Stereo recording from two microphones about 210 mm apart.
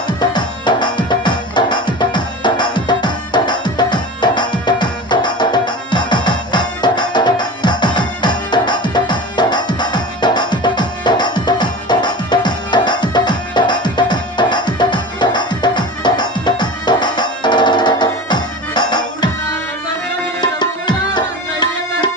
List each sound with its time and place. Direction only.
0.2 s music: 20° left (ahead or behind)
20.4 s tabla: 20° left (ahead or behind)